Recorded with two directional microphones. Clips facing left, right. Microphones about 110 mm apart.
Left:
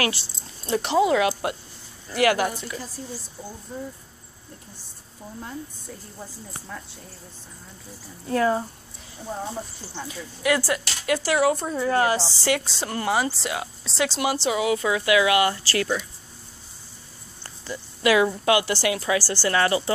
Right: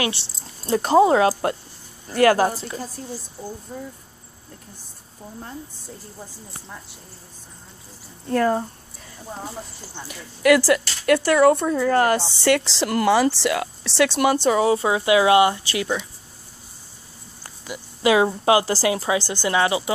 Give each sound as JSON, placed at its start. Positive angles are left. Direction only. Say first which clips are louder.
{"t": 0.4, "sound": "speech", "louder": "right 4 dB", "side_deg": -40}
{"t": 8.3, "sound": "speech", "louder": "right 2 dB", "side_deg": -45}
{"t": 10.0, "sound": "speech", "louder": "right 7 dB", "side_deg": -70}
{"t": 17.4, "sound": "a sound", "louder": "even", "side_deg": -15}
{"t": 18.0, "sound": "a woman's voice", "louder": "right 2 dB", "side_deg": -25}